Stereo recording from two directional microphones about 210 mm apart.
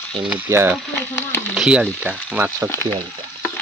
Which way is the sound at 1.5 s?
5° right (ahead or behind).